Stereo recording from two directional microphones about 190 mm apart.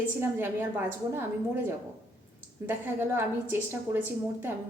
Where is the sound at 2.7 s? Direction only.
10° right (ahead or behind).